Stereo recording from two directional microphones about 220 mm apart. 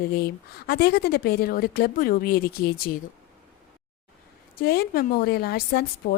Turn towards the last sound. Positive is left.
turn(degrees=45)  # may be behind; listen again after turning